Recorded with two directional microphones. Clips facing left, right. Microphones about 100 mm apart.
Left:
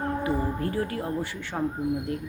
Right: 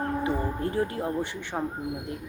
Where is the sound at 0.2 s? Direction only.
25° right (ahead or behind).